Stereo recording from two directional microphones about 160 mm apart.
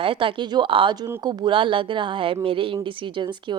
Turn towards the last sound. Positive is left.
turn(degrees=-30)  # may be behind; listen again after turning